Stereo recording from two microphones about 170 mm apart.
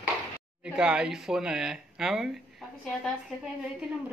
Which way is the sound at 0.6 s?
5° right (ahead or behind).